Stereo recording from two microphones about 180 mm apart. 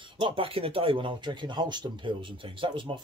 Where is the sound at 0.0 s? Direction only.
30° right (ahead or behind).